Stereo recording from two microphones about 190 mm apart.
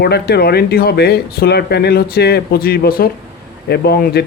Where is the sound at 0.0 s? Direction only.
60° left (ahead or behind).